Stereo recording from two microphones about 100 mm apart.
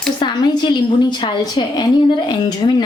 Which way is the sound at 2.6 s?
60° left (ahead or behind).